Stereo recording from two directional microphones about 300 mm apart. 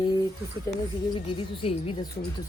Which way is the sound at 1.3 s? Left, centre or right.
Centre.